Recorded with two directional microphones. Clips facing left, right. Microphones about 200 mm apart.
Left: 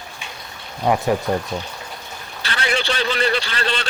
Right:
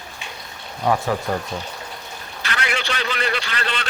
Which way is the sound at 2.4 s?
30° left (ahead or behind).